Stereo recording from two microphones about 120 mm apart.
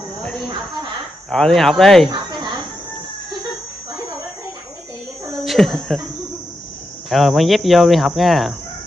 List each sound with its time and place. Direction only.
1.3 s speech: 5° left (ahead or behind)
2.1 s chicken: 35° right (ahead or behind)
5.4 s a sound: centre (ahead or behind)
7.1 s speech: centre (ahead or behind)